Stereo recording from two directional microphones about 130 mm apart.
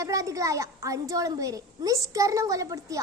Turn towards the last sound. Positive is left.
turn(degrees=-25)  # may be behind; listen again after turning